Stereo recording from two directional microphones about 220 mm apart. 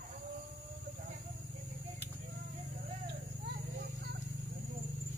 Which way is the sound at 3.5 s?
50° right (ahead or behind).